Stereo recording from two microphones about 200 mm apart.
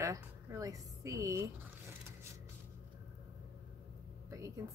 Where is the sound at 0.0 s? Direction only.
15° right (ahead or behind).